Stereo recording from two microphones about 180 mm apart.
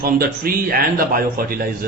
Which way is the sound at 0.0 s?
55° right (ahead or behind).